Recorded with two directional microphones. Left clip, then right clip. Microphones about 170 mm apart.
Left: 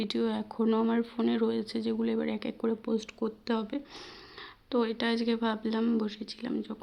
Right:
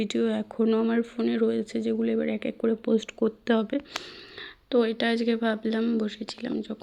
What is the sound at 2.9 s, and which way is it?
Speech, 25° right (ahead or behind).